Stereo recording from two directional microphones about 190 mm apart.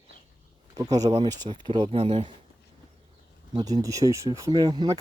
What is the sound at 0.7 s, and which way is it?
Speech, 20° right (ahead or behind).